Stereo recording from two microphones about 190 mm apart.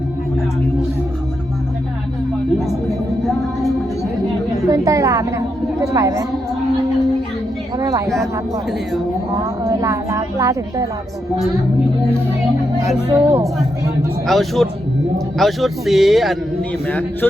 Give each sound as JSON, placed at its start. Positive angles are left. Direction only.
{"t": 4.7, "sound": "a woman's voice", "side_deg": -15}
{"t": 7.8, "sound": "speech", "side_deg": -15}
{"t": 9.4, "sound": "a woman's voice", "side_deg": -15}
{"t": 13.1, "sound": "a man's voice", "side_deg": -25}
{"t": 14.3, "sound": "a man's voice", "side_deg": 0}